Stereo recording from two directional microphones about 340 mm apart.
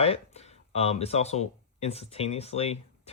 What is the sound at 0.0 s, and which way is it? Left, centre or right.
Speech, centre.